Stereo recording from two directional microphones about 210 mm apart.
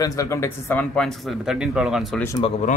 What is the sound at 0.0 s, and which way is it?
Speech, 15° left (ahead or behind).